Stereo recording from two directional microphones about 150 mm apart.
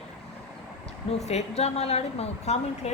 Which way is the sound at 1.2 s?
45° left (ahead or behind).